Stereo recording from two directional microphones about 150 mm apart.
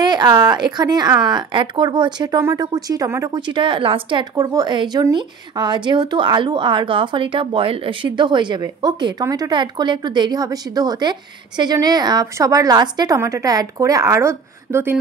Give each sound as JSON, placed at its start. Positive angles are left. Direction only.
{"t": 0.0, "sound": "a woman's voice", "side_deg": -30}